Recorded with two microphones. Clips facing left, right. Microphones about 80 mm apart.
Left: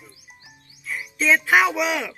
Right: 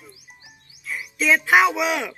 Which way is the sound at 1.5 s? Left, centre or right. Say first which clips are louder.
Right 1 dB; centre.